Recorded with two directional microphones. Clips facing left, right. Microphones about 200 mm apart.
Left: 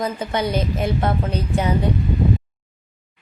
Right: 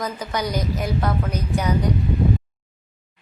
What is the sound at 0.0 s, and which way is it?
A woman's voice, 25° left (ahead or behind).